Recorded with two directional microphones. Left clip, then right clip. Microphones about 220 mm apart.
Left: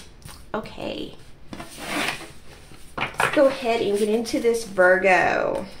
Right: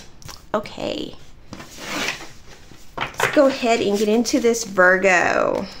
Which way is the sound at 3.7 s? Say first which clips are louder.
Right 3 dB; 40° right (ahead or behind).